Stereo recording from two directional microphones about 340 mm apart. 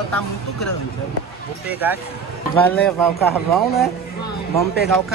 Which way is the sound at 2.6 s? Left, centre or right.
Centre.